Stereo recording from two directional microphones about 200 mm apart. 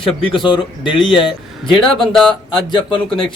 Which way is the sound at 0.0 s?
25° left (ahead or behind).